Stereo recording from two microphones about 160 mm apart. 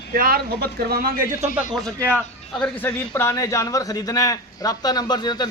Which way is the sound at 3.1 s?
20° left (ahead or behind).